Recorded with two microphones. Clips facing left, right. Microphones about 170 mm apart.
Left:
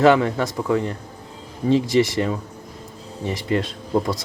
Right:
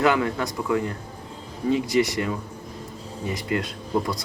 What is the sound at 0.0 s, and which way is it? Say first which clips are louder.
Speech: left 6 dB; 30° left (ahead or behind).